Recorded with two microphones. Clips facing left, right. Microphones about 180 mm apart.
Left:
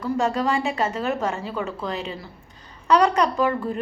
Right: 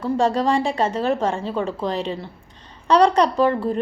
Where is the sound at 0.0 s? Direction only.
30° right (ahead or behind).